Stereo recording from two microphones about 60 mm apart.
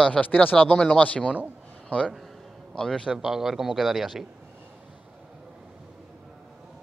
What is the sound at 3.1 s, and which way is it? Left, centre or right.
A man's voice, centre.